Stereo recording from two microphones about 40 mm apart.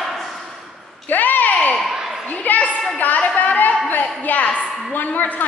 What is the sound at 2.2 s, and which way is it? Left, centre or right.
Speech, left.